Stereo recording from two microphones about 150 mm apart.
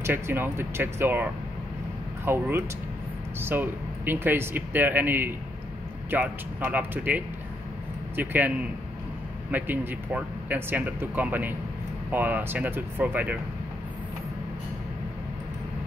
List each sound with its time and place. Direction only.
0.0 s speech: 15° right (ahead or behind)